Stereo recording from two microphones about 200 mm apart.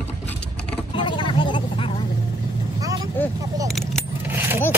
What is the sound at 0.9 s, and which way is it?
Vehicle, 25° left (ahead or behind).